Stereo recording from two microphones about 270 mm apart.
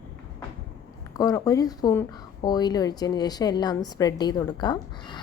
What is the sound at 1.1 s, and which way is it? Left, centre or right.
Speech, centre.